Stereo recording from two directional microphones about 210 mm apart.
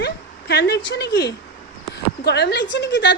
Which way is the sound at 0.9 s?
50° left (ahead or behind).